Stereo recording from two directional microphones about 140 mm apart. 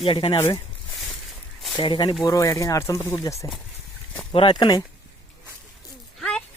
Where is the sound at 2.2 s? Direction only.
25° left (ahead or behind).